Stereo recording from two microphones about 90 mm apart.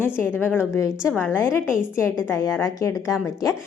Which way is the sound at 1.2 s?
25° left (ahead or behind).